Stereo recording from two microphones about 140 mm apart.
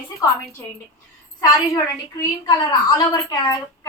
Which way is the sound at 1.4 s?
25° left (ahead or behind).